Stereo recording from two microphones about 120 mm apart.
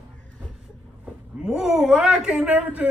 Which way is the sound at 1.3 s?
5° right (ahead or behind).